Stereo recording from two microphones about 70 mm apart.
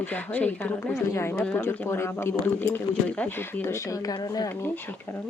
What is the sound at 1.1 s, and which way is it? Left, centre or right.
Speech, left.